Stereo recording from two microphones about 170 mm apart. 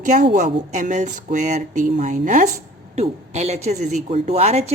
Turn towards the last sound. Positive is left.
turn(degrees=-40)  # may be behind; listen again after turning